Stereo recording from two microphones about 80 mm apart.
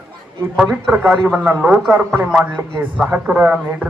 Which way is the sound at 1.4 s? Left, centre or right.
Centre.